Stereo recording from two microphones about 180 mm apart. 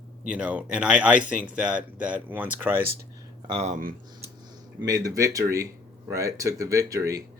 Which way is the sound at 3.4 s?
30° right (ahead or behind).